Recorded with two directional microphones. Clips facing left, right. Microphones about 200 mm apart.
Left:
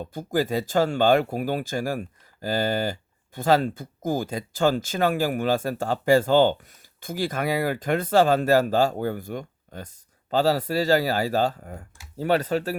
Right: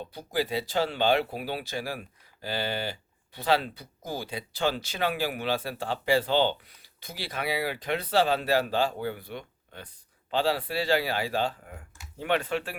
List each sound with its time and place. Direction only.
0.0 s speech: 45° left (ahead or behind)